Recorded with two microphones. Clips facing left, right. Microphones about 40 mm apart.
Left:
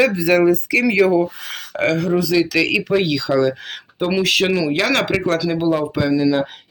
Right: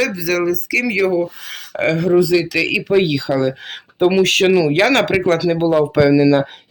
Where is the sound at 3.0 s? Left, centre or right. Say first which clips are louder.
Even; right.